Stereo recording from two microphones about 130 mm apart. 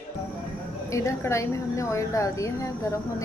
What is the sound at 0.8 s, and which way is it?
A woman's voice, 25° left (ahead or behind).